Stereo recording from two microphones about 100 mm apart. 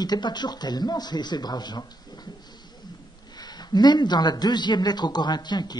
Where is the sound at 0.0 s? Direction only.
45° left (ahead or behind).